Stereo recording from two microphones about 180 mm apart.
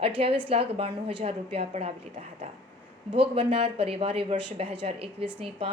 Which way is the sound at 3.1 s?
30° right (ahead or behind).